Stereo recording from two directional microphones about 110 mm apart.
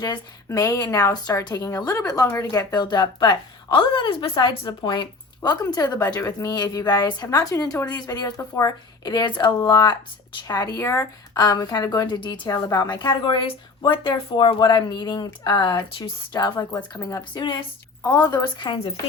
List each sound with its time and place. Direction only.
0.0 s speech: 35° left (ahead or behind)
11.3 s speech: 35° left (ahead or behind)
16.9 s speech: 30° left (ahead or behind)
17.3 s speech: 45° left (ahead or behind)
18.0 s speech: 35° left (ahead or behind)